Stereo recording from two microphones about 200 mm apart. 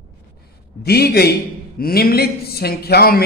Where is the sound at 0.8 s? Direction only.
50° left (ahead or behind).